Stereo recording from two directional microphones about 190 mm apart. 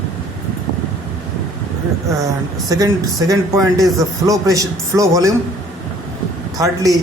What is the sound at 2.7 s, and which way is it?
A man's voice, 20° right (ahead or behind).